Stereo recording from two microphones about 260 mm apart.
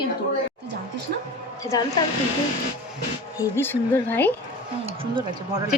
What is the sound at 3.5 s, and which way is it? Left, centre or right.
Speech, centre.